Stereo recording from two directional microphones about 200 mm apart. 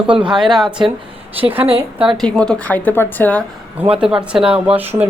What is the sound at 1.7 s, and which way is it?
Speech, 30° right (ahead or behind).